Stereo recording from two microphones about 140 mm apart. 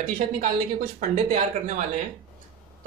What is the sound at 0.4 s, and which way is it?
Speech, 75° right (ahead or behind).